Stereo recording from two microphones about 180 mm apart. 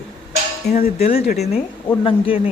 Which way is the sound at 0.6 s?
60° left (ahead or behind).